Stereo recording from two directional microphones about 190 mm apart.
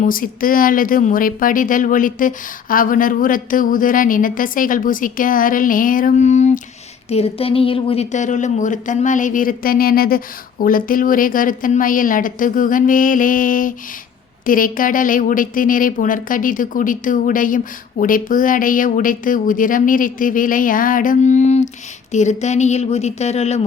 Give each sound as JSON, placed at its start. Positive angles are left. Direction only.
{"t": 0.0, "sound": "a woman's voice", "side_deg": 45}